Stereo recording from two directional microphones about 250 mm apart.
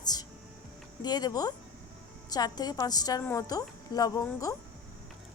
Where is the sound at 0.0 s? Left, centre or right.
Centre.